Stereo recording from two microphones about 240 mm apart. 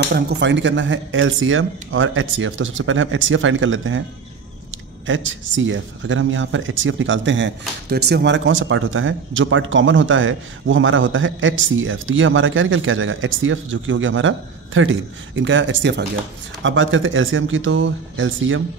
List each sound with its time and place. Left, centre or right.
0.1 s speech: right